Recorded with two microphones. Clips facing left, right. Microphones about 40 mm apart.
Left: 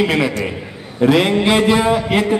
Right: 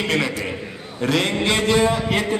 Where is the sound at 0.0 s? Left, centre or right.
Centre.